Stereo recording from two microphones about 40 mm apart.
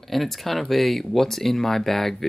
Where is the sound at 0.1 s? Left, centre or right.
Centre.